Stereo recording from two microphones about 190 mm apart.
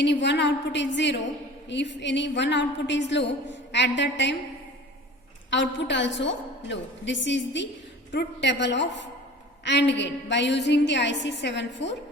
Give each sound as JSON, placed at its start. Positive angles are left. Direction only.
{"t": 0.0, "sound": "a woman's voice", "side_deg": 70}
{"t": 5.5, "sound": "a woman's voice", "side_deg": 70}